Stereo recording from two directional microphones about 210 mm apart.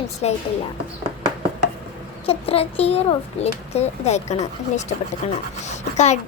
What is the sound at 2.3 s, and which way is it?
A child's voice, 30° left (ahead or behind).